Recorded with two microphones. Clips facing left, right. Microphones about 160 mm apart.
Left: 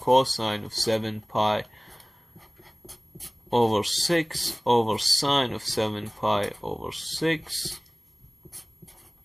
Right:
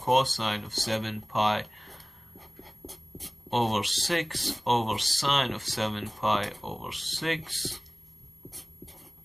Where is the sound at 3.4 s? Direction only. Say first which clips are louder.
Left 6 dB; 40° left (ahead or behind).